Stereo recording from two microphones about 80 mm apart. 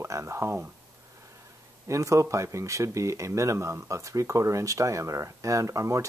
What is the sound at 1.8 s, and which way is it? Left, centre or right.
Speech, right.